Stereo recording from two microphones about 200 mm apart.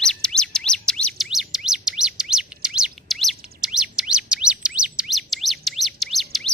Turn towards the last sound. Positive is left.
turn(degrees=0)  # may be behind; listen again after turning